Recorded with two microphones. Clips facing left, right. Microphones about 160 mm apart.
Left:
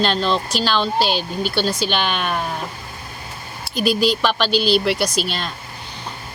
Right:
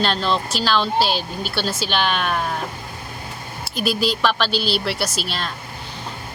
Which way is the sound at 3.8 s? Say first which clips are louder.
Left 3 dB; 5° right (ahead or behind).